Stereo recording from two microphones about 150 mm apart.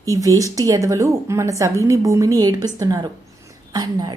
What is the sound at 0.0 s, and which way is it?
A woman's voice, 20° right (ahead or behind).